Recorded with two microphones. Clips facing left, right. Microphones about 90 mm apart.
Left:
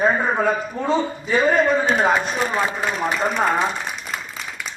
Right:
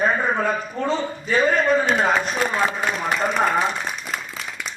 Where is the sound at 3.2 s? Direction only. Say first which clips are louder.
Even; centre (ahead or behind).